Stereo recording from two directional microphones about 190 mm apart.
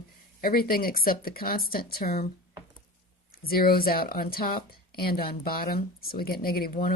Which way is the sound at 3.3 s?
50° left (ahead or behind).